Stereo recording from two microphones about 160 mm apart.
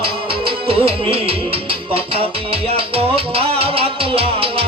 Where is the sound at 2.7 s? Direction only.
35° right (ahead or behind).